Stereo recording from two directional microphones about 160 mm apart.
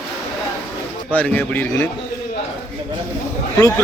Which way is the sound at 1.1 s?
10° left (ahead or behind).